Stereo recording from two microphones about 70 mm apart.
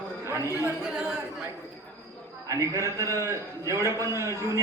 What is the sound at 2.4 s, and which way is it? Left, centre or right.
A man's voice, right.